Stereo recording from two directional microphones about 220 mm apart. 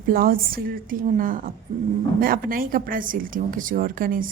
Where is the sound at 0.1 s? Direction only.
40° right (ahead or behind).